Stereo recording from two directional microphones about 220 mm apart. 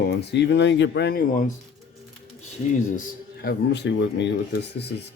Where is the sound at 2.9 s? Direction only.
40° left (ahead or behind).